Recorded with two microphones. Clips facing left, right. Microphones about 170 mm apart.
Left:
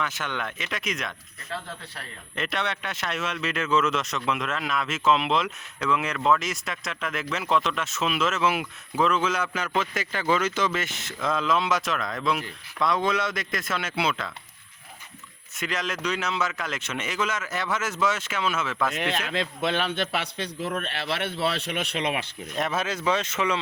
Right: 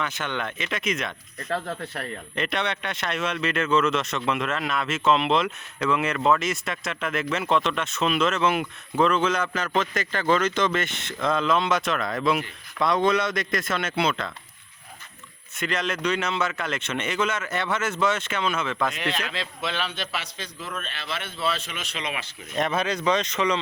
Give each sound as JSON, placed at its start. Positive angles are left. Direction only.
{"t": 0.0, "sound": "speech", "side_deg": 0}
{"t": 2.3, "sound": "speech", "side_deg": 0}
{"t": 15.5, "sound": "speech", "side_deg": 5}
{"t": 18.9, "sound": "a man's voice", "side_deg": 50}
{"t": 22.5, "sound": "speech", "side_deg": 5}